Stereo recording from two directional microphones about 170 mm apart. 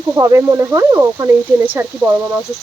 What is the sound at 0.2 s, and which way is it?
Speech, 20° right (ahead or behind).